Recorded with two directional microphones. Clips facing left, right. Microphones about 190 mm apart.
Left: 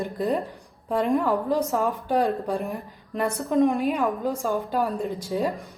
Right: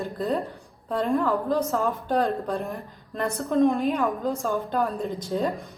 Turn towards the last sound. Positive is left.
turn(degrees=10)  # may be behind; listen again after turning